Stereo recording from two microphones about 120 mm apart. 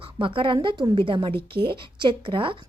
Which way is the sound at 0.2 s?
45° right (ahead or behind).